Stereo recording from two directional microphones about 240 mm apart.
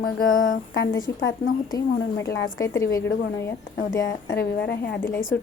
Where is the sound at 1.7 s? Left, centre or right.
Centre.